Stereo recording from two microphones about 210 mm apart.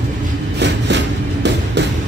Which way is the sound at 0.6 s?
55° right (ahead or behind).